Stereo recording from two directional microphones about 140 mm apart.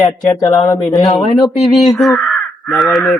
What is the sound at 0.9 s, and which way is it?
Speech, 25° left (ahead or behind).